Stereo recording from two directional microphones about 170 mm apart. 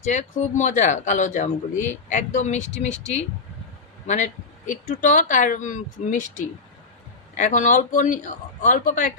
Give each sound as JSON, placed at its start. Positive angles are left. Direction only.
{"t": 0.0, "sound": "speech", "side_deg": 45}